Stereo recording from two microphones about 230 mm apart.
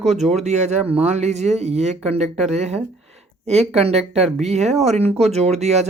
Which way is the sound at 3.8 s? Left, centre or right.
Right.